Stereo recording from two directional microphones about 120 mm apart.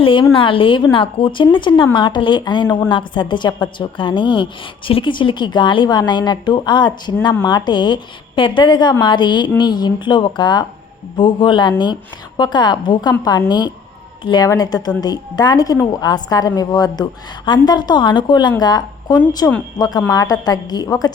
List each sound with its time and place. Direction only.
0.0 s a woman's voice: 45° left (ahead or behind)
19.4 s speech: 20° left (ahead or behind)
20.1 s a woman's voice: 30° left (ahead or behind)